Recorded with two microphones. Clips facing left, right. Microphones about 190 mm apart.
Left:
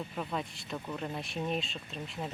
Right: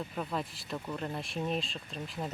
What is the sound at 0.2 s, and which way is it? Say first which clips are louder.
Speech: right 1 dB; centre (ahead or behind).